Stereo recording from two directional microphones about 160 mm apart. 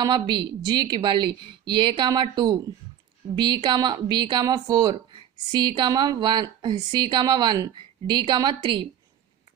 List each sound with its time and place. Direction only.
0.0 s a woman's voice: 25° right (ahead or behind)